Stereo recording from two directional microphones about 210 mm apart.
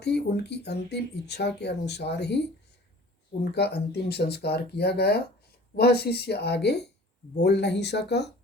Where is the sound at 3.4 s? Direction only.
50° left (ahead or behind).